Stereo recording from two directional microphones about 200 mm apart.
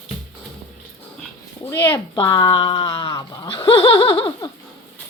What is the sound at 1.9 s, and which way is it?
Speech, 20° left (ahead or behind).